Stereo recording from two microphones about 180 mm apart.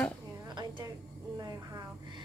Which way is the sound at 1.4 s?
20° right (ahead or behind).